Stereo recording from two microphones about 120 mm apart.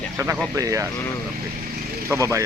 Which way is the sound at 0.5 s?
25° right (ahead or behind).